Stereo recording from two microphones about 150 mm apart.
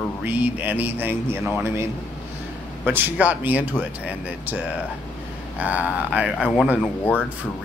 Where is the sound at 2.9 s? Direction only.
10° right (ahead or behind).